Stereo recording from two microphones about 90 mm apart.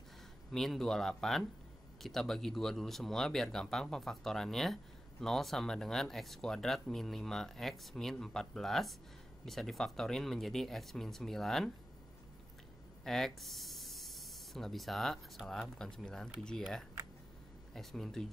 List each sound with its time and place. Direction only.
0.5 s speech: 5° left (ahead or behind)
13.0 s speech: 5° left (ahead or behind)
17.7 s speech: 5° left (ahead or behind)